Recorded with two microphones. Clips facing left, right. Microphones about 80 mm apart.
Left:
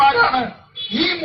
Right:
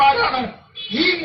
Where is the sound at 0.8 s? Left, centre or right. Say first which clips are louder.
Right 1 dB; left.